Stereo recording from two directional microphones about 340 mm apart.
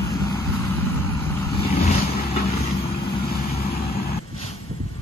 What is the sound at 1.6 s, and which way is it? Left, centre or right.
Vehicle, left.